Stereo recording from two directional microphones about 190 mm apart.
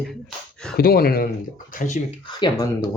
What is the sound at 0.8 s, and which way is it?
Speech, 50° left (ahead or behind).